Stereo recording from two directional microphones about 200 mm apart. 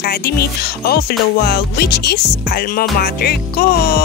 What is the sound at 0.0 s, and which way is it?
Speech, 50° left (ahead or behind).